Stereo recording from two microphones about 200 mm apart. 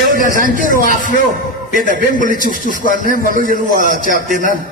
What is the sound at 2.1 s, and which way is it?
Music, 40° left (ahead or behind).